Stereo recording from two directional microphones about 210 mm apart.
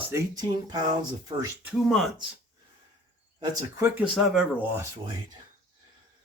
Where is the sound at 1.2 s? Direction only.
15° right (ahead or behind).